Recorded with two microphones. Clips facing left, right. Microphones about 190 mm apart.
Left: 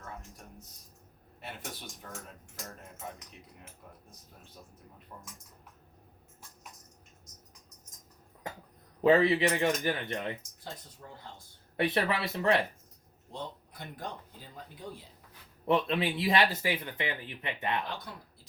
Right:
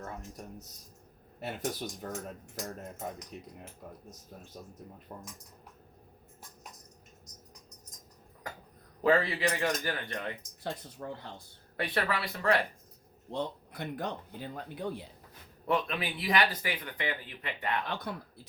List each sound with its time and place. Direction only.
1.4 s speech: 40° right (ahead or behind)
5.1 s speech: 35° right (ahead or behind)
9.0 s speech: 20° left (ahead or behind)
10.6 s speech: 70° right (ahead or behind)
11.8 s speech: 25° left (ahead or behind)
13.3 s speech: 65° right (ahead or behind)
15.6 s speech: 25° left (ahead or behind)
17.8 s speech: 60° right (ahead or behind)